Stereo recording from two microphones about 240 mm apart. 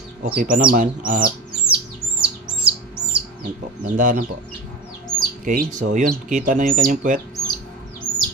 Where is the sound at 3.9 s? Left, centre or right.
Right.